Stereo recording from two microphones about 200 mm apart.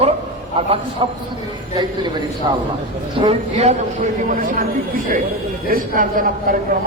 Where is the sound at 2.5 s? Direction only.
20° right (ahead or behind).